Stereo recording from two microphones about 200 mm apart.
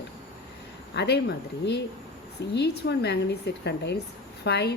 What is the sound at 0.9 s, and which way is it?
Speech, 55° left (ahead or behind).